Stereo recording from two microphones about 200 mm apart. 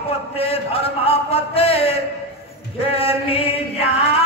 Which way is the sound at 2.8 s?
30° left (ahead or behind).